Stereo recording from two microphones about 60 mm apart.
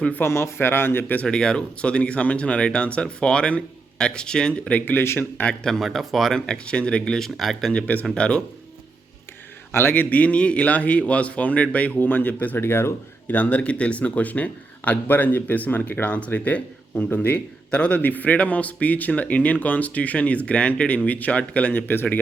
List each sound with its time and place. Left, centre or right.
0.3 s speech: left
1.3 s speech: centre
4.9 s speech: left
5.4 s speech: centre
5.7 s speech: centre
6.4 s speech: centre
7.2 s speech: centre
8.1 s speech: centre
9.9 s speech: left
12.5 s speech: left
13.3 s speech: left